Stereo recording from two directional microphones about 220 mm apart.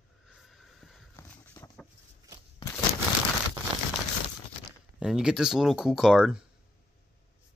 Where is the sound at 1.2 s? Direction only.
15° left (ahead or behind).